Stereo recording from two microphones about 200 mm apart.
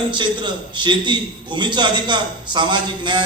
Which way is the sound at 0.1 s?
25° right (ahead or behind).